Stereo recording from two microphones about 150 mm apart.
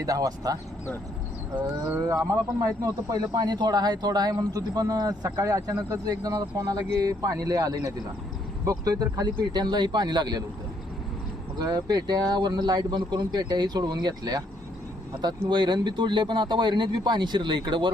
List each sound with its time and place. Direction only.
0.0 s speech: 25° right (ahead or behind)
1.6 s speech: 20° right (ahead or behind)
11.6 s speech: 25° right (ahead or behind)